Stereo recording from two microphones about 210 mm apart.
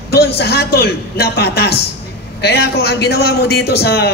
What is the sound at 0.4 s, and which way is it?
A man's voice, 50° left (ahead or behind).